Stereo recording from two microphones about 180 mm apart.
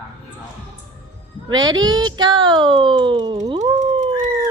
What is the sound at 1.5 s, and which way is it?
Speech, 25° right (ahead or behind).